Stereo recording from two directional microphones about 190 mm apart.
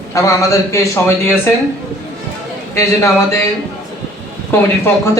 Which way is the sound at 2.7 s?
15° left (ahead or behind).